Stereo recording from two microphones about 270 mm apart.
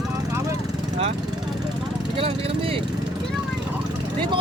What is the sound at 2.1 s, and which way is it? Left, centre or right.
Speech, centre.